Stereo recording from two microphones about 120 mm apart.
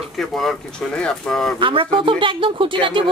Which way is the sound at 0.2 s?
Centre (ahead or behind).